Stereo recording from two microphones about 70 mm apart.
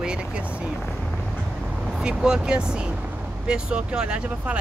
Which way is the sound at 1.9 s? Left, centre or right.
Centre.